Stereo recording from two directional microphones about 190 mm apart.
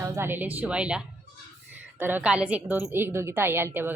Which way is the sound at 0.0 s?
10° right (ahead or behind).